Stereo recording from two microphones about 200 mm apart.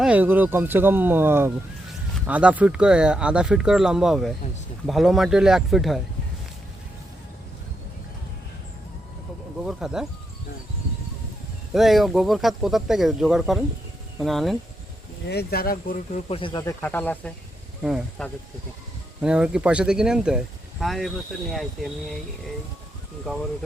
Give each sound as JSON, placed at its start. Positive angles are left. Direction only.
{"t": 0.0, "sound": "speech", "side_deg": -5}
{"t": 9.6, "sound": "speech", "side_deg": -5}
{"t": 11.7, "sound": "speech", "side_deg": 0}
{"t": 15.3, "sound": "speech", "side_deg": 55}
{"t": 16.3, "sound": "speech", "side_deg": 25}
{"t": 16.8, "sound": "speech", "side_deg": 10}
{"t": 17.8, "sound": "speech", "side_deg": -5}
{"t": 23.2, "sound": "speech", "side_deg": 0}